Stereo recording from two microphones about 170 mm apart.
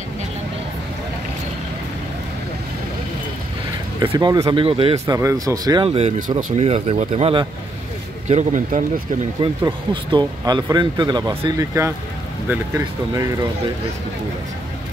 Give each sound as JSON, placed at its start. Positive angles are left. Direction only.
{"t": 4.0, "sound": "speech", "side_deg": -30}
{"t": 5.0, "sound": "speech", "side_deg": -20}
{"t": 5.9, "sound": "a man's voice", "side_deg": -35}
{"t": 9.7, "sound": "speech", "side_deg": -25}